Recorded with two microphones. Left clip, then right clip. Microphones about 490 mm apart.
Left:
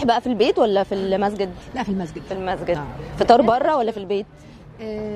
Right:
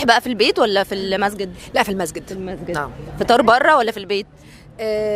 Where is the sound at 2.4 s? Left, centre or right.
Left.